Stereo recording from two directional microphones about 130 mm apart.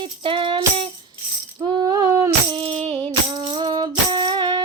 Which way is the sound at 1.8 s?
30° right (ahead or behind).